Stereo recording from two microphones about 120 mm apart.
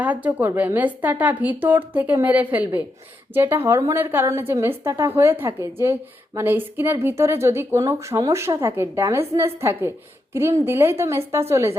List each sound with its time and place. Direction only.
0.0 s a woman's voice: 15° right (ahead or behind)